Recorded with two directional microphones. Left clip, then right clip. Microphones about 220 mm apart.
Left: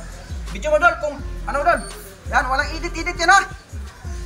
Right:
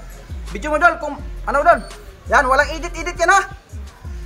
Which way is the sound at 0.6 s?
20° right (ahead or behind).